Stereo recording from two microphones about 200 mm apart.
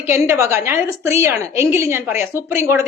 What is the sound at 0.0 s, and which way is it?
A woman's voice, 10° right (ahead or behind).